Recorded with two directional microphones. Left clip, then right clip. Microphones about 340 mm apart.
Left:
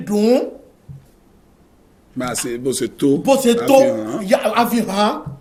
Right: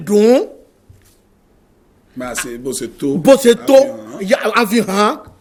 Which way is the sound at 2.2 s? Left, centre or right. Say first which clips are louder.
Even; centre.